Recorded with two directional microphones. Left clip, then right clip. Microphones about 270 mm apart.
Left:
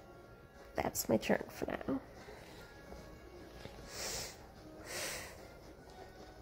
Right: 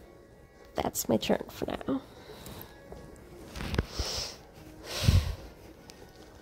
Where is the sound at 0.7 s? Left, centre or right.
Centre.